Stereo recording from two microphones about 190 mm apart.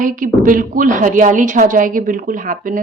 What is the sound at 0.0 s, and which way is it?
A woman's voice, 45° right (ahead or behind).